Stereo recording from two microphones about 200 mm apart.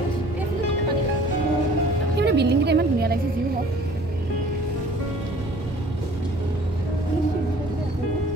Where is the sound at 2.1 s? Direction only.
55° right (ahead or behind).